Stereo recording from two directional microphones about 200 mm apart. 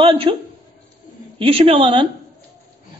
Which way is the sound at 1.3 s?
25° right (ahead or behind).